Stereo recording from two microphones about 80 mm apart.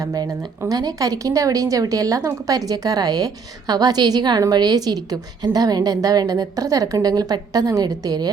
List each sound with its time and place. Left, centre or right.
0.0 s a woman's voice: right